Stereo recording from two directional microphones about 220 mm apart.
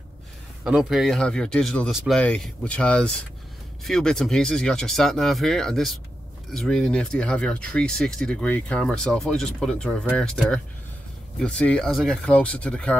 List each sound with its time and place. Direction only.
0.7 s speech: 5° right (ahead or behind)